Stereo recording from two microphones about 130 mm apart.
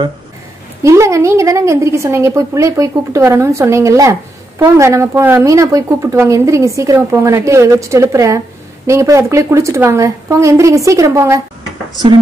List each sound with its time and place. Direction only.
0.8 s a woman's voice: 25° right (ahead or behind)